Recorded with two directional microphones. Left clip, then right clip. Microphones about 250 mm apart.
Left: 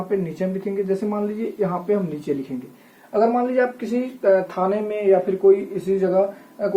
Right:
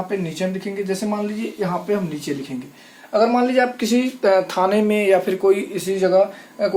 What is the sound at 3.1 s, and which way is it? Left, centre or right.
Speech, right.